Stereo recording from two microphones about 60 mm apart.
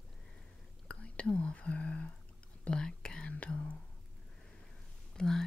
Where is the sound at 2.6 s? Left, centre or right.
Centre.